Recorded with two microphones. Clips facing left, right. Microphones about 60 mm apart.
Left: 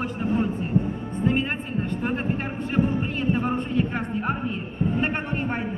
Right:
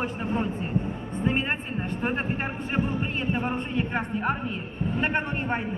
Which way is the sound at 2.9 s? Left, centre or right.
Right.